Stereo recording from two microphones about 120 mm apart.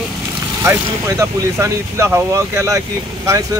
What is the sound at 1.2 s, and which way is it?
Speech, 25° right (ahead or behind).